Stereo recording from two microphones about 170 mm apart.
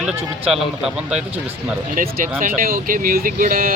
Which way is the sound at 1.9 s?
60° right (ahead or behind).